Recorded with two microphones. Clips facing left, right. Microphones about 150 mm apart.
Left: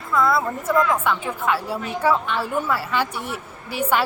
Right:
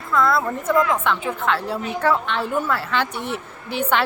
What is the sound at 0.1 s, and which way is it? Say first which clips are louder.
A woman's voice: right 1 dB; 5° left (ahead or behind).